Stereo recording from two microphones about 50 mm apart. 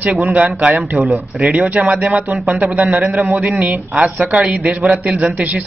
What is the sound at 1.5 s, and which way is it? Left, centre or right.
A man's voice, right.